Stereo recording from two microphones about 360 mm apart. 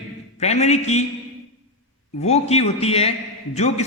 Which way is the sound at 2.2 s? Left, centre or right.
Centre.